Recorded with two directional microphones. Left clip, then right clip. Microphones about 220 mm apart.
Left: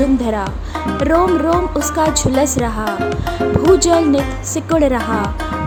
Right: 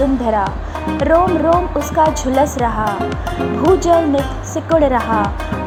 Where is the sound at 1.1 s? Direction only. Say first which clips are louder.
Right 2 dB; 25° left (ahead or behind).